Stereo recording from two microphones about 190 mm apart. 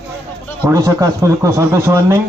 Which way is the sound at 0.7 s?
15° right (ahead or behind).